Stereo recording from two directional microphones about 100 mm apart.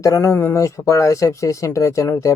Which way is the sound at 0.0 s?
30° left (ahead or behind).